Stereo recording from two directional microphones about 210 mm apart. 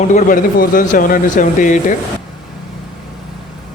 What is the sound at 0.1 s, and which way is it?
Speech, 40° left (ahead or behind).